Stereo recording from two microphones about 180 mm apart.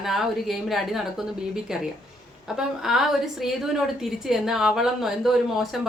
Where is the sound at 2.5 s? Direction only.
Centre (ahead or behind).